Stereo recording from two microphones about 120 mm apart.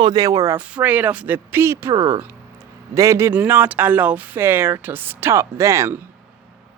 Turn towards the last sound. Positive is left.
turn(degrees=-20)  # may be behind; listen again after turning